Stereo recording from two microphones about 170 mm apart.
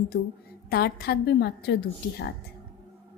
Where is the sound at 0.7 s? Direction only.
65° left (ahead or behind).